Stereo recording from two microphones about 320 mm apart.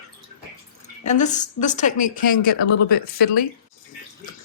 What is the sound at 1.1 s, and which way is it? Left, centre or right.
A woman's voice, left.